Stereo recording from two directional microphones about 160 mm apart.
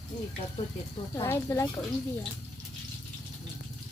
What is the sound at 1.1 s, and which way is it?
Speech, 20° left (ahead or behind).